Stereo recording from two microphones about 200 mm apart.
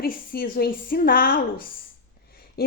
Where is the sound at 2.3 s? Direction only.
50° left (ahead or behind).